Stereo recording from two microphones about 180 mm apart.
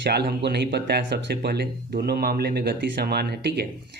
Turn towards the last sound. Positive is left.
turn(degrees=-65)  # may be behind; listen again after turning